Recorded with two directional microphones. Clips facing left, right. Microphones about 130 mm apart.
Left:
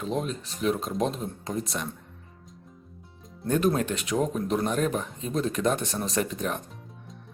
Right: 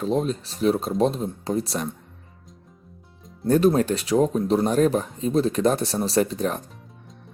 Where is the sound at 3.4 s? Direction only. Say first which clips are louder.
Right 6 dB; 35° right (ahead or behind).